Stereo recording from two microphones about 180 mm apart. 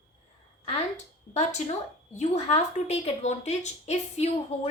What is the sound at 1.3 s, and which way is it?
A woman's voice, 40° left (ahead or behind).